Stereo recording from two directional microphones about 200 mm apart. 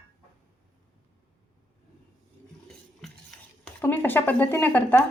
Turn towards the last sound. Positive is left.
turn(degrees=10)  # may be behind; listen again after turning